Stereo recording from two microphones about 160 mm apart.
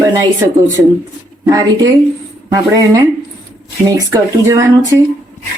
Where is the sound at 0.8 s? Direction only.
15° right (ahead or behind).